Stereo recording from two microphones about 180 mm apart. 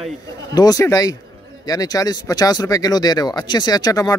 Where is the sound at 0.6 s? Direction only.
20° left (ahead or behind).